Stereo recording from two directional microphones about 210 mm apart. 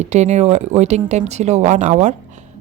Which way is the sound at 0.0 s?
35° right (ahead or behind).